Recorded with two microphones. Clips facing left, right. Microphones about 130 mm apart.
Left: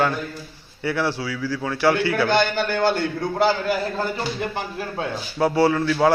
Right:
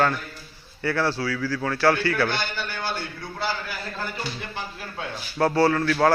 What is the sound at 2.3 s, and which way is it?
A man's voice, 55° left (ahead or behind).